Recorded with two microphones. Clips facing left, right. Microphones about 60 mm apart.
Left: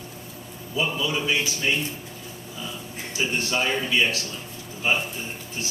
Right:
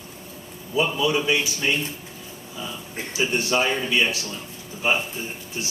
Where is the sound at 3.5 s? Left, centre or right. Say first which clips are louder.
Right 2 dB; centre.